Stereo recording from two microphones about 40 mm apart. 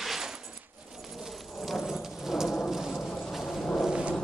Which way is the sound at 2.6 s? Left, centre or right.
Centre.